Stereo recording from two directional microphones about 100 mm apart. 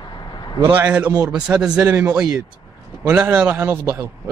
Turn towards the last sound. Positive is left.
turn(degrees=-20)  # may be behind; listen again after turning